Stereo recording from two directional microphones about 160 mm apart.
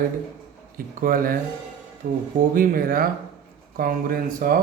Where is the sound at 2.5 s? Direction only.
60° right (ahead or behind).